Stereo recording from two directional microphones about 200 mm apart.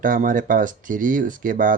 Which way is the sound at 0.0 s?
40° right (ahead or behind).